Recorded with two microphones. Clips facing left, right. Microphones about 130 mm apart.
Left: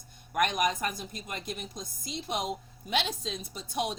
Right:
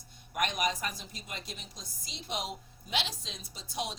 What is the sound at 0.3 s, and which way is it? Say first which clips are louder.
Speech: left 4 dB; 50° left (ahead or behind).